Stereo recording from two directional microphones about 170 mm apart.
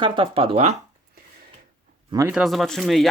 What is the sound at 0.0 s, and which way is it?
Speech, 30° right (ahead or behind).